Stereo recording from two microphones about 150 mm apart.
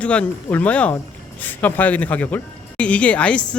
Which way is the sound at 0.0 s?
10° left (ahead or behind).